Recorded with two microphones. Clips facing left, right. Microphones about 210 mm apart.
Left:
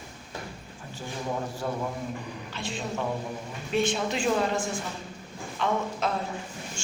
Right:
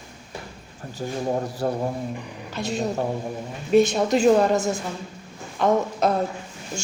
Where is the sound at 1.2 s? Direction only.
40° right (ahead or behind).